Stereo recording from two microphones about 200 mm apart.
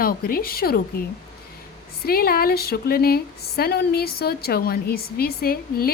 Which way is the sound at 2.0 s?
50° left (ahead or behind).